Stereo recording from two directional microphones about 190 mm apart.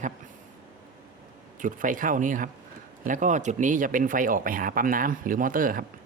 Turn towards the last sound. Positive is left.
turn(degrees=-45)  # may be behind; listen again after turning